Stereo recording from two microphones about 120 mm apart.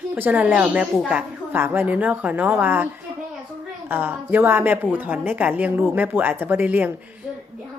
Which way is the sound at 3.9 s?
15° right (ahead or behind).